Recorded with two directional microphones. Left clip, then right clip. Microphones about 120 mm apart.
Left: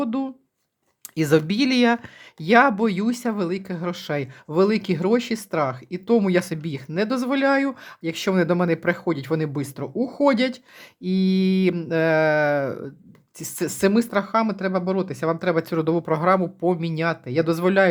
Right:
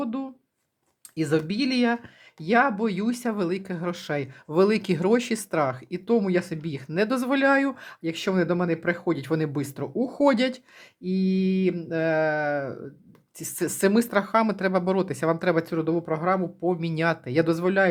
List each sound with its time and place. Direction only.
0.0 s speech: 25° left (ahead or behind); by 6.1 s 10° left (ahead or behind)
6.1 s speech: 25° left (ahead or behind)
6.7 s speech: 10° left (ahead or behind)
11.0 s mantra: 30° left (ahead or behind)
13.4 s speech: 10° left (ahead or behind)
15.6 s mantra: 30° left (ahead or behind)
16.8 s speech: 5° left (ahead or behind)
17.5 s speech: 25° left (ahead or behind)